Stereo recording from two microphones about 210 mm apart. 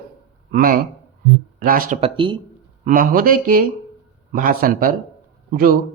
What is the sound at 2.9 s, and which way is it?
Speech, 40° right (ahead or behind).